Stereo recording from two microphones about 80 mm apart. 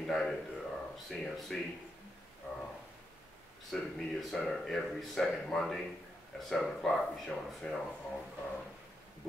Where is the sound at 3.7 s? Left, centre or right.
Centre.